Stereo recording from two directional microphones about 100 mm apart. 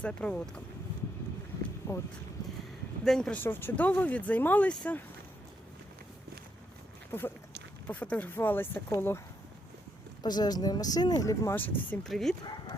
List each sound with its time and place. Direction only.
0.0 s speech: 10° left (ahead or behind)
1.8 s speech: 20° left (ahead or behind)
3.0 s speech: 5° left (ahead or behind)
3.3 s speech: 20° left (ahead or behind)
7.1 s speech: 20° left (ahead or behind)
10.2 s speech: 45° left (ahead or behind)
11.5 s speech: 15° left (ahead or behind)
12.0 s speech: centre (ahead or behind)